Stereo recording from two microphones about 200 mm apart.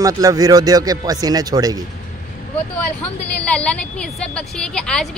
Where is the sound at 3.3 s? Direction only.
5° left (ahead or behind).